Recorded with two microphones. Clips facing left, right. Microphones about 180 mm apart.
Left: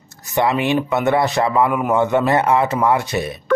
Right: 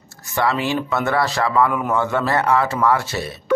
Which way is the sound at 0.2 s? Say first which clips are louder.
Left 3 dB; 20° left (ahead or behind).